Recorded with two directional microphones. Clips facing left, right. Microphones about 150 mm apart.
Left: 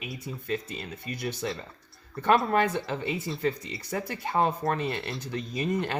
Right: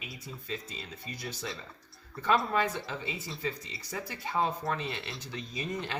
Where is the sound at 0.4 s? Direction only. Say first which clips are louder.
Left 8 dB; 55° left (ahead or behind).